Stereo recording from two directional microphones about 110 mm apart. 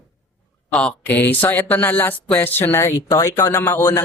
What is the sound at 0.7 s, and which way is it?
Speech, 10° left (ahead or behind).